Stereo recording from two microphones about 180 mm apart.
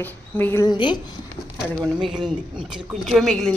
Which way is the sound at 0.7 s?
25° left (ahead or behind).